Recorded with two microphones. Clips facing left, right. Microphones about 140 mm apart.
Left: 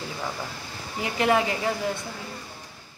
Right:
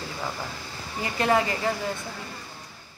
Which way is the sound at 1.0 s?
15° left (ahead or behind).